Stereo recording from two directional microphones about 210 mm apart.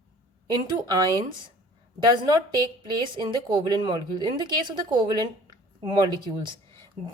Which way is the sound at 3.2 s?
20° right (ahead or behind).